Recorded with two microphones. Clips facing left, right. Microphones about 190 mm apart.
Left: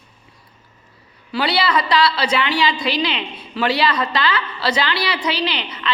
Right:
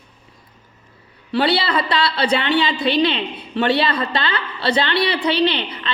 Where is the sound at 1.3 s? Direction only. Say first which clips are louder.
Right 1 dB; 25° right (ahead or behind).